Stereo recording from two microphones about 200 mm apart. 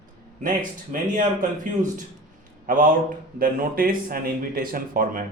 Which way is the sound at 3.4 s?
45° right (ahead or behind).